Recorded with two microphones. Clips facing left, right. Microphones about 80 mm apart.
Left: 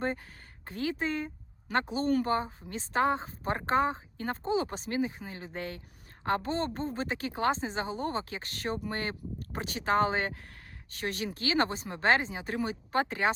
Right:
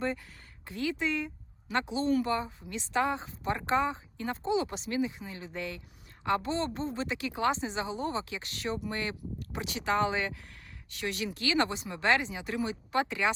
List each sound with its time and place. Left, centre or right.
0.7 s a woman's voice: left